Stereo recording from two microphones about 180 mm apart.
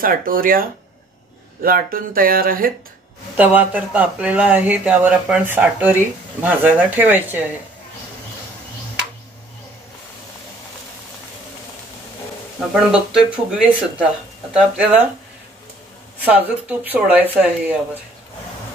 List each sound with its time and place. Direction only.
0.0 s speech: 50° right (ahead or behind)
3.3 s speech: 10° right (ahead or behind)
12.9 s speech: 5° right (ahead or behind)
16.3 s speech: 10° right (ahead or behind)